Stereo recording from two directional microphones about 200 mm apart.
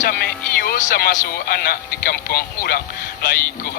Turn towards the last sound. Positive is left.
turn(degrees=50)  # may be behind; listen again after turning